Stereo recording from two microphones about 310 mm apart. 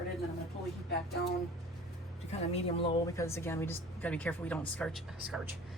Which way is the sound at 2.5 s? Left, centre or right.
Centre.